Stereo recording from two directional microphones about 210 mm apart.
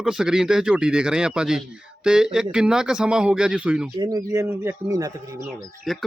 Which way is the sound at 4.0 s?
20° right (ahead or behind).